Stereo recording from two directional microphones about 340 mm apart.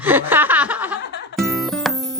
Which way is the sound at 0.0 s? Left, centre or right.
Centre.